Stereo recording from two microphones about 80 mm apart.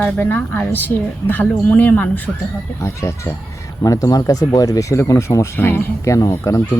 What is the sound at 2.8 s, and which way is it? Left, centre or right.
Speech, left.